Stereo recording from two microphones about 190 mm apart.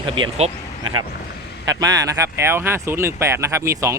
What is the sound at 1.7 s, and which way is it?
Speech, 20° right (ahead or behind).